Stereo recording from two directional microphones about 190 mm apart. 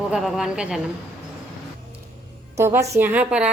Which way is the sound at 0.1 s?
Centre (ahead or behind).